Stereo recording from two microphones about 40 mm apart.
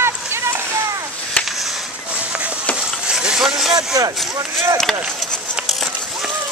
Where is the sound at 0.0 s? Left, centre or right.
Right.